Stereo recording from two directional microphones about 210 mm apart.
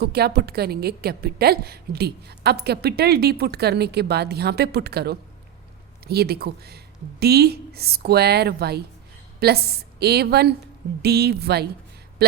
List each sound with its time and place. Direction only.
0.0 s speech: 50° right (ahead or behind)